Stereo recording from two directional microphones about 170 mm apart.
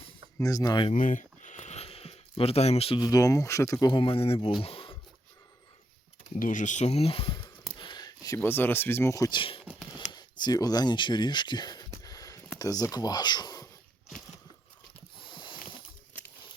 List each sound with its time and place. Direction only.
0.3 s speech: 20° left (ahead or behind)
0.9 s speech: 50° left (ahead or behind)
4.6 s a sound: 30° left (ahead or behind)
6.3 s speech: 50° left (ahead or behind); by 7.5 s 30° left (ahead or behind)
7.8 s a sound: 25° left (ahead or behind)
8.4 s speech: 10° left (ahead or behind)
10.1 s a sound: 25° left (ahead or behind)
12.5 s speech: 20° left (ahead or behind)
15.2 s ratchet: 30° left (ahead or behind)